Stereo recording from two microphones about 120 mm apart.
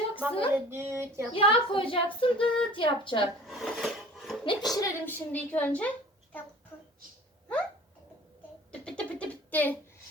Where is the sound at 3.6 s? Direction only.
Centre (ahead or behind).